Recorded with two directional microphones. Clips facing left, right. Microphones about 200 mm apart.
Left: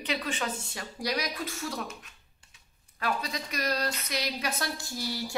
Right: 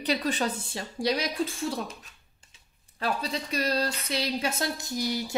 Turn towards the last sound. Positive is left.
turn(degrees=-20)  # may be behind; listen again after turning